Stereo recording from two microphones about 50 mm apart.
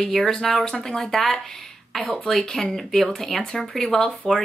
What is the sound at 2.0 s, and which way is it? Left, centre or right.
Speech, left.